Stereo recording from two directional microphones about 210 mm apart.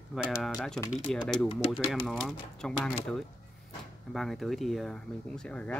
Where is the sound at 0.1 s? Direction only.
Centre (ahead or behind).